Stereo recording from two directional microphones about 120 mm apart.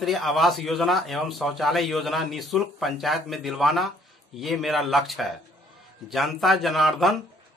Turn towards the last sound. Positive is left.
turn(degrees=0)  # may be behind; listen again after turning